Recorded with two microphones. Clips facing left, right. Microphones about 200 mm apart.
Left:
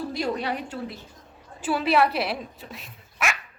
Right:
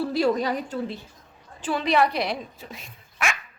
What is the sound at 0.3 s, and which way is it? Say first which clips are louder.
Speech: right 3 dB; 35° right (ahead or behind).